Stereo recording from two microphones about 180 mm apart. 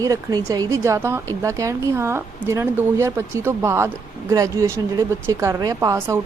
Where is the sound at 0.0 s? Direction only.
20° right (ahead or behind).